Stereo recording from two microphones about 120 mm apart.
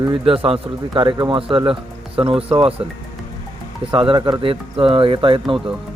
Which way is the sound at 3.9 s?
40° right (ahead or behind).